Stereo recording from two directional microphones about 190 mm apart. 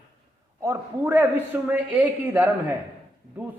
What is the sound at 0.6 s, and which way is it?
A man's voice, 15° right (ahead or behind).